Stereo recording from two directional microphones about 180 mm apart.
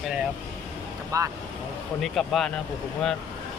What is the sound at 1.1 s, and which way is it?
Speech, 20° right (ahead or behind).